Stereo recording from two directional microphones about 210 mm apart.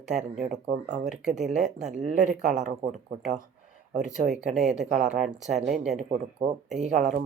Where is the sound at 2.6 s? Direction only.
35° right (ahead or behind).